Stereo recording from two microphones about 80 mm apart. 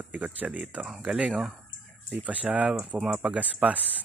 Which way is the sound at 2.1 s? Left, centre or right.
Centre.